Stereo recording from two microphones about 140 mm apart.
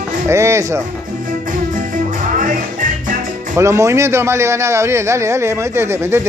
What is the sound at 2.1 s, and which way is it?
Music, 70° right (ahead or behind).